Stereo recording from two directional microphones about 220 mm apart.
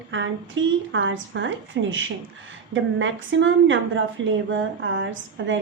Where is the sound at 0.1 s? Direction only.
60° right (ahead or behind).